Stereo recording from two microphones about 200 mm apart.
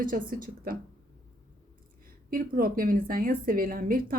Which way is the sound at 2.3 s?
45° right (ahead or behind).